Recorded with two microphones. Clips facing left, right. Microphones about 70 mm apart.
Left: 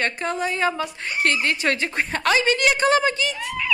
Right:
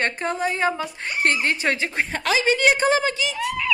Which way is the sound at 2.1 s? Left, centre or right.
Centre.